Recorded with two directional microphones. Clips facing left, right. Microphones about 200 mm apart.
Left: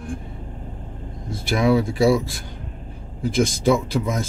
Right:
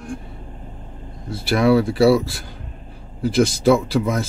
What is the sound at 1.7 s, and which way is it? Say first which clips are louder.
Speech: right 4 dB; 15° left (ahead or behind).